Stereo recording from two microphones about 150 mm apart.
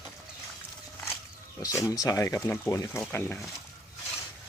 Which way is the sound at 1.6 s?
20° left (ahead or behind).